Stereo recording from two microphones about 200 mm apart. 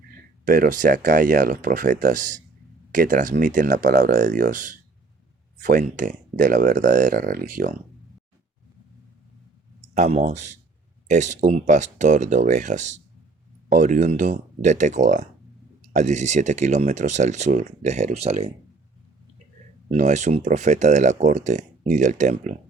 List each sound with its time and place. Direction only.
0.4 s speech: 40° right (ahead or behind)
9.9 s speech: 35° right (ahead or behind)
19.9 s speech: 35° right (ahead or behind)